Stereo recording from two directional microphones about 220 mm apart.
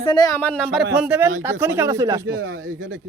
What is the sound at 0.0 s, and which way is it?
Speech, 20° left (ahead or behind).